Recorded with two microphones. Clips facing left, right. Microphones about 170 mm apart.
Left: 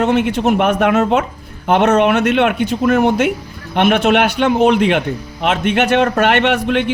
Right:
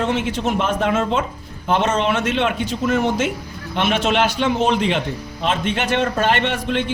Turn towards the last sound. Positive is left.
turn(degrees=65)  # may be behind; listen again after turning